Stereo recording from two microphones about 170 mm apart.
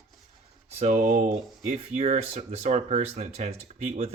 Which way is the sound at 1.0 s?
55° right (ahead or behind).